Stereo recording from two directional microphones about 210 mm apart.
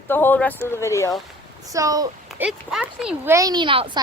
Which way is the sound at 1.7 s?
15° right (ahead or behind).